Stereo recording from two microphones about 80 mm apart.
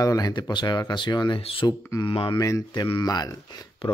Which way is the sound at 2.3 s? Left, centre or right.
Left.